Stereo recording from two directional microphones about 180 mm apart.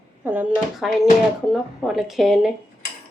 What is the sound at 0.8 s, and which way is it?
A woman's voice, centre (ahead or behind).